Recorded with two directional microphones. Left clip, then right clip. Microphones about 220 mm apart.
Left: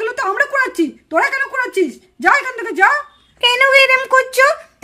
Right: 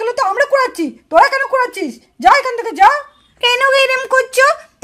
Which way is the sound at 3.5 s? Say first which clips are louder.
Left 1 dB; 20° right (ahead or behind).